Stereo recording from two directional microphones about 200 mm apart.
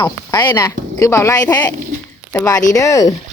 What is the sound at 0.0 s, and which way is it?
Speech, 20° left (ahead or behind).